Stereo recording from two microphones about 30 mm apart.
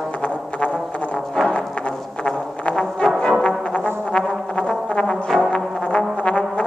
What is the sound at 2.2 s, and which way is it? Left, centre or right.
Music, left.